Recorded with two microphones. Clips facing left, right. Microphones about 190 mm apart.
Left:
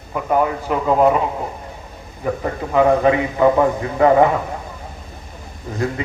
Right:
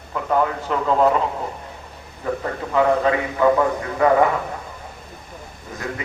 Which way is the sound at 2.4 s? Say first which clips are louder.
Left 4 dB; 20° left (ahead or behind).